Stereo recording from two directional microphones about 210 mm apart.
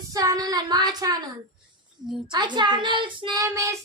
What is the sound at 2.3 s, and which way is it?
Speech, 20° right (ahead or behind).